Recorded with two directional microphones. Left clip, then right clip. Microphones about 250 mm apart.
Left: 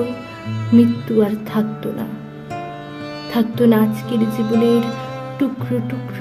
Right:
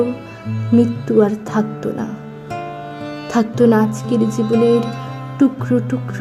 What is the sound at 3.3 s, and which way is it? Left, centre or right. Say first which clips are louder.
Speech: right 2 dB; centre.